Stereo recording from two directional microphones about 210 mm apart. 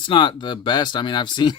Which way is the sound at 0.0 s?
20° left (ahead or behind).